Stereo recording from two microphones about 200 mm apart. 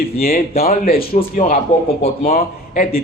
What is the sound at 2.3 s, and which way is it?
Speech, 40° left (ahead or behind).